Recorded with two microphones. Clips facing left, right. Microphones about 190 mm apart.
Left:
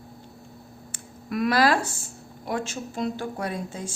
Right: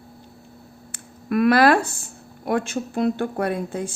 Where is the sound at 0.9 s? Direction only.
60° right (ahead or behind).